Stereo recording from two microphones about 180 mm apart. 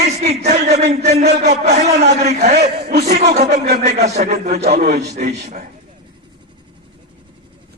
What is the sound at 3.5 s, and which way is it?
Speech, 65° right (ahead or behind).